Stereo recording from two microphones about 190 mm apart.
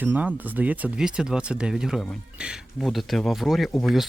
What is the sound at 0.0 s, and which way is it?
Speech, 10° right (ahead or behind).